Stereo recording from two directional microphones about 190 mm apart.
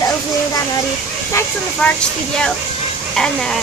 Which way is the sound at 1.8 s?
5° left (ahead or behind).